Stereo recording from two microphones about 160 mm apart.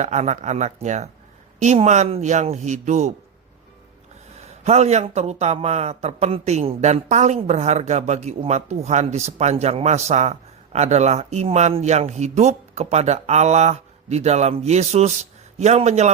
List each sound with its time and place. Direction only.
0.0 s a man's voice: 45° right (ahead or behind)
4.4 s a man's voice: 40° right (ahead or behind)